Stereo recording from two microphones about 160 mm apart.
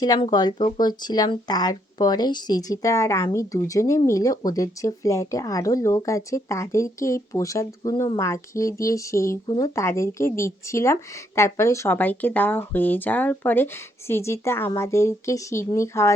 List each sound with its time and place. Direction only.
0.0 s speech: 25° left (ahead or behind)